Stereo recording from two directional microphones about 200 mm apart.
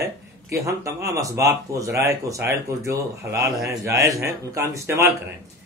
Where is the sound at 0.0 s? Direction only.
15° right (ahead or behind).